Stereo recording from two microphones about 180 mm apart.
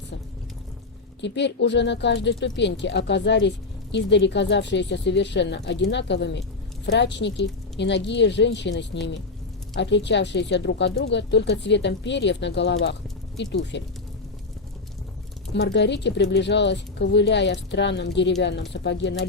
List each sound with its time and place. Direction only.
1.2 s speech: 75° left (ahead or behind)
15.5 s speech: 75° left (ahead or behind)